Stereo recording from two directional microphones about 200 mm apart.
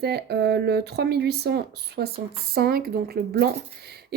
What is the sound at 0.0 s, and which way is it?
Speech, 55° right (ahead or behind).